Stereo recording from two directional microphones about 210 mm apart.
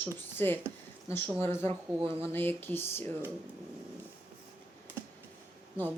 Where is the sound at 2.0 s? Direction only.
25° right (ahead or behind).